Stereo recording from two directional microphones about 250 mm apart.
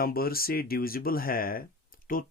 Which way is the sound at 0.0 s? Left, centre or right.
Left.